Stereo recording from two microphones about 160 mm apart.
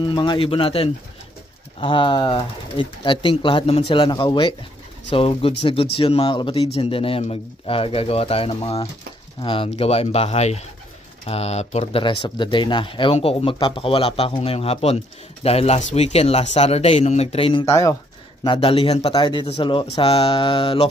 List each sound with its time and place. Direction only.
0.0 s speech: 30° left (ahead or behind)
12.0 s speech: 30° left (ahead or behind)
17.6 s speech: 20° left (ahead or behind)
18.4 s speech: 35° left (ahead or behind)